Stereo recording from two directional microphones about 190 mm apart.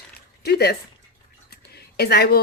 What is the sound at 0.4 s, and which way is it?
A woman's voice, 55° left (ahead or behind).